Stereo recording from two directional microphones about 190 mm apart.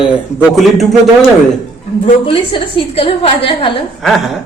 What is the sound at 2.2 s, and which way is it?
A woman's voice, 30° left (ahead or behind).